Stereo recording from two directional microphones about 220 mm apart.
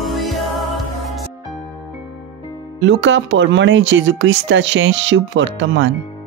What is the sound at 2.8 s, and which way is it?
Speech, 60° right (ahead or behind).